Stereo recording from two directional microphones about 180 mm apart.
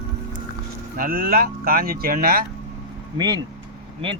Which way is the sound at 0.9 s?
50° right (ahead or behind).